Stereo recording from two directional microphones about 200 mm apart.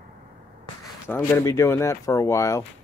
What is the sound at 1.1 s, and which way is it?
Speech, 15° left (ahead or behind).